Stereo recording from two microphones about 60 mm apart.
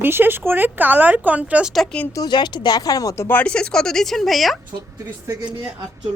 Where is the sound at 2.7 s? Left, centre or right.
Left.